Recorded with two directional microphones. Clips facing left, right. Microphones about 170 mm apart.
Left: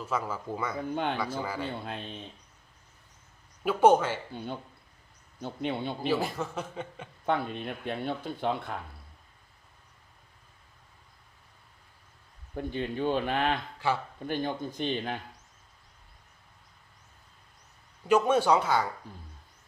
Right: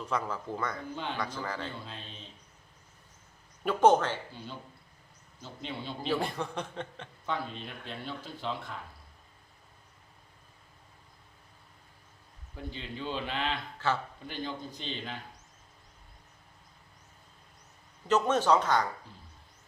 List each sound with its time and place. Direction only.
0.0 s a man's voice: 5° left (ahead or behind)
1.8 s speech: 60° left (ahead or behind)
3.6 s speech: 5° left (ahead or behind)
5.4 s speech: 55° left (ahead or behind)
6.1 s a man's voice: centre (ahead or behind)
7.3 s speech: 60° left (ahead or behind)
12.5 s speech: 55° left (ahead or behind)
13.7 s a man's voice: 15° left (ahead or behind)
14.3 s speech: 50° left (ahead or behind)
18.1 s speech: 10° left (ahead or behind)